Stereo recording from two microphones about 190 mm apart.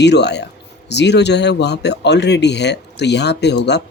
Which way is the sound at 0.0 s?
65° left (ahead or behind).